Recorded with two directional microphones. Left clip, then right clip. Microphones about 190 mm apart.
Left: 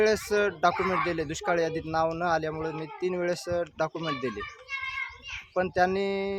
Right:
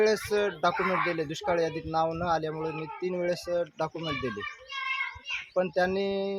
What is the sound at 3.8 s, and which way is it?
Speech, 10° left (ahead or behind).